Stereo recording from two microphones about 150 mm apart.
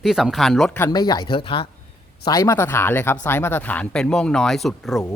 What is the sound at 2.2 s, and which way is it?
Speech, 25° left (ahead or behind).